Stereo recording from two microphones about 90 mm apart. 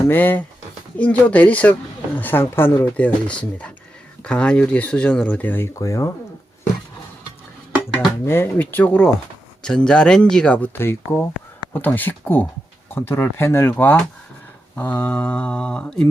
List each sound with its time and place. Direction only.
0.0 s speech: 25° left (ahead or behind)
8.2 s speech: 25° left (ahead or behind)
10.8 s speech: 25° left (ahead or behind); by 16.0 s 10° left (ahead or behind)